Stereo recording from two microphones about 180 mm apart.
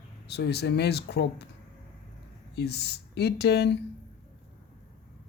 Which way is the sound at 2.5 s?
65° left (ahead or behind).